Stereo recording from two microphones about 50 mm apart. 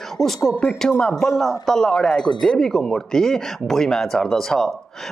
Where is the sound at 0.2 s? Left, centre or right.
Centre.